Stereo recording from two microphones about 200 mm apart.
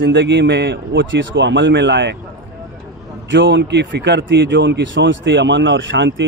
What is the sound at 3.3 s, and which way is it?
A man's voice, 65° right (ahead or behind).